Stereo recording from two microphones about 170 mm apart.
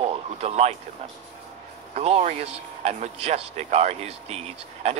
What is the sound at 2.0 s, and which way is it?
Speech, 40° right (ahead or behind).